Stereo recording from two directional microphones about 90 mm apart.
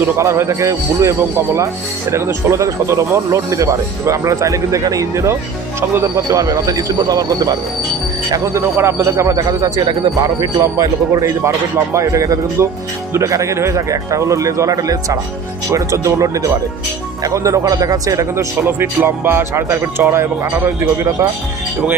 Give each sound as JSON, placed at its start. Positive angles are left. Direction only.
{"t": 0.2, "sound": "speech", "side_deg": -35}
{"t": 8.5, "sound": "speech", "side_deg": -30}
{"t": 10.6, "sound": "speech", "side_deg": -40}